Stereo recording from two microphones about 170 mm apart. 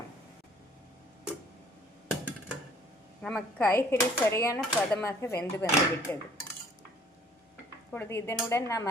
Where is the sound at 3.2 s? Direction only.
10° left (ahead or behind).